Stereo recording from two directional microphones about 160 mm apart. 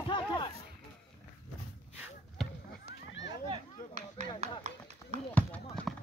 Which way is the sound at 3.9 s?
40° right (ahead or behind).